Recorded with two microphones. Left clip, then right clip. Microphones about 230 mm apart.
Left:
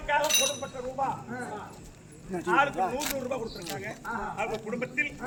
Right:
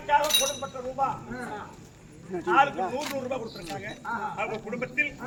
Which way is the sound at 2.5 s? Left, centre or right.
Centre.